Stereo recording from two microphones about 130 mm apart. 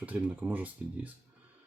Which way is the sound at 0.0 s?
10° right (ahead or behind).